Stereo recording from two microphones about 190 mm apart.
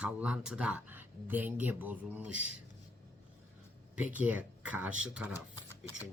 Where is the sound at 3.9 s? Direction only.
10° right (ahead or behind).